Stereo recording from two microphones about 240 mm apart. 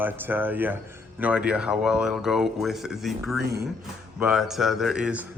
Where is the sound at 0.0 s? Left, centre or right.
Centre.